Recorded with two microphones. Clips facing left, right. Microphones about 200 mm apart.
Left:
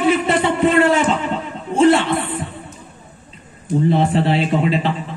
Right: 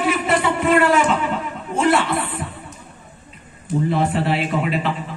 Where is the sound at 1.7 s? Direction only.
25° left (ahead or behind).